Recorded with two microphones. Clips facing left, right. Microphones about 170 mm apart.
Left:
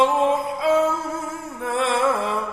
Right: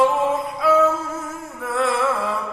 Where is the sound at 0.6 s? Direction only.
25° left (ahead or behind).